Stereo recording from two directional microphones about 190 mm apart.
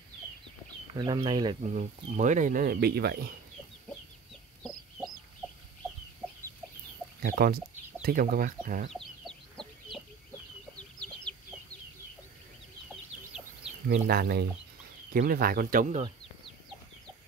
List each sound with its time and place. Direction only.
0.9 s speech: 25° right (ahead or behind)
1.6 s speech: 40° right (ahead or behind); by 3.3 s 55° right (ahead or behind)
4.6 s chicken: centre (ahead or behind)
7.2 s speech: 50° right (ahead or behind)
8.9 s chicken: centre (ahead or behind)
13.8 s speech: 55° right (ahead or behind)